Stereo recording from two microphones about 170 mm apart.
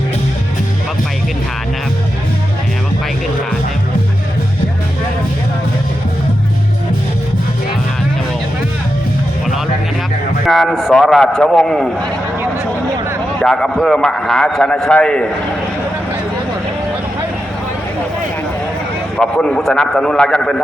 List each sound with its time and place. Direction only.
10.4 s a man's voice: centre (ahead or behind)
13.4 s a man's voice: 5° left (ahead or behind)
19.1 s a man's voice: 5° left (ahead or behind)